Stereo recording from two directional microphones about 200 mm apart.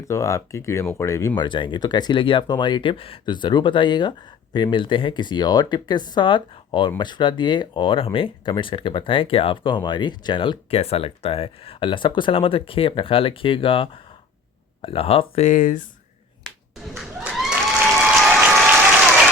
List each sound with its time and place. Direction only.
0.0 s speech: 15° left (ahead or behind); by 15.9 s 40° left (ahead or behind)
16.9 s applause: 5° right (ahead or behind)